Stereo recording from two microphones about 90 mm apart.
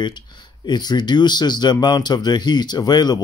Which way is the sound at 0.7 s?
50° left (ahead or behind).